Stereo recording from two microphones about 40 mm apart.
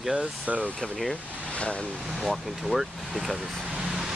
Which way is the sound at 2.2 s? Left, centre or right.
Centre.